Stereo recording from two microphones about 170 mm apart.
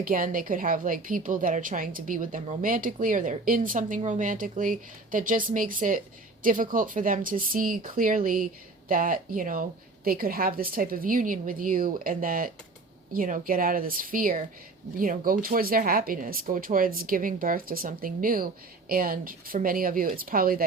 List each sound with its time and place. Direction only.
0.0 s a woman's voice: 55° right (ahead or behind)